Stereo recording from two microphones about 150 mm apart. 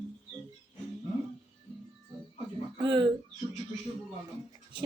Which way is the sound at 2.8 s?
35° right (ahead or behind).